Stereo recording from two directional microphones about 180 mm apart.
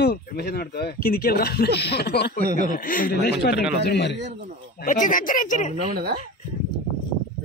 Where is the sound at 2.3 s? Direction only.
55° right (ahead or behind).